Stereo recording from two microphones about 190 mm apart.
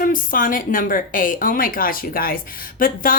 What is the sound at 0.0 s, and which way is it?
A woman's voice, 45° left (ahead or behind).